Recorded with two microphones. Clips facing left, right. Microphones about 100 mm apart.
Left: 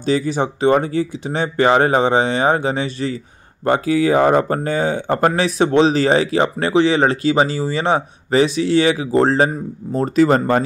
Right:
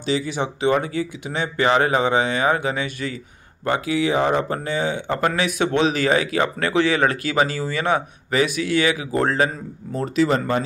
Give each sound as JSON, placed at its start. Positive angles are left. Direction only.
{"t": 0.0, "sound": "speech", "side_deg": 40}
{"t": 9.9, "sound": "speech", "side_deg": 40}